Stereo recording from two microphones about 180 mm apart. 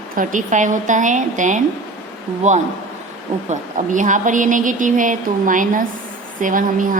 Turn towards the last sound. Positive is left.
turn(degrees=-50)  # may be behind; listen again after turning